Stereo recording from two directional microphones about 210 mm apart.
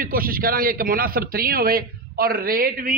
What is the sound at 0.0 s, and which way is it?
A man's voice, 45° right (ahead or behind).